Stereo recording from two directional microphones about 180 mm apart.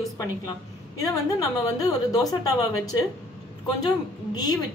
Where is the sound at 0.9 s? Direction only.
20° left (ahead or behind).